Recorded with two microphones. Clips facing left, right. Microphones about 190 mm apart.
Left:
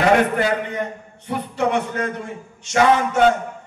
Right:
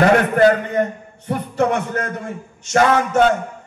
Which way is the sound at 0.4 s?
45° right (ahead or behind).